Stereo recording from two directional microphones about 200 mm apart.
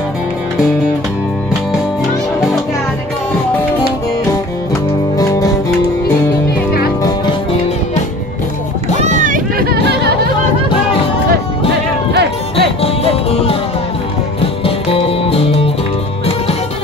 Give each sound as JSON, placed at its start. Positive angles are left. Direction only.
{"t": 5.1, "sound": "music", "side_deg": 15}
{"t": 7.0, "sound": "music", "side_deg": 20}
{"t": 9.0, "sound": "music", "side_deg": -40}
{"t": 12.1, "sound": "music", "side_deg": -55}
{"t": 12.8, "sound": "music", "side_deg": 30}